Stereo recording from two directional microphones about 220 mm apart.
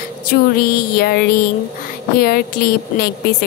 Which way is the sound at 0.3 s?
45° left (ahead or behind).